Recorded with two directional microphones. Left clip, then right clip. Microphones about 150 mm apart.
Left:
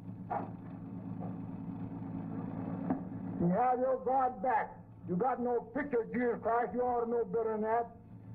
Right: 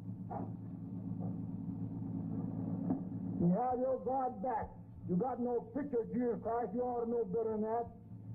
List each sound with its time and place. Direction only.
2.0 s vehicle: 30° right (ahead or behind)
5.1 s a man's voice: 30° right (ahead or behind)